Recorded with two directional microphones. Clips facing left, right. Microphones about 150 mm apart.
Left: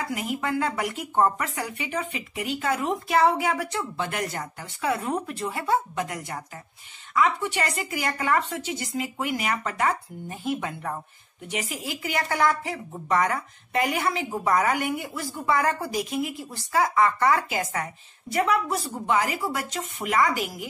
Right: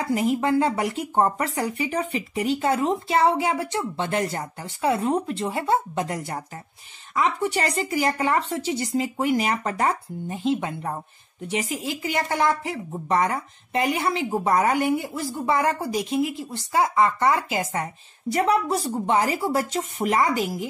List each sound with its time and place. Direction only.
0.0 s speech: 30° right (ahead or behind)
10.2 s speech: 20° right (ahead or behind)